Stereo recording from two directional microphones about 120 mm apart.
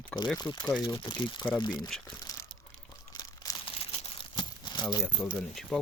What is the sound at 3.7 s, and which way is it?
Crumpling, 50° left (ahead or behind).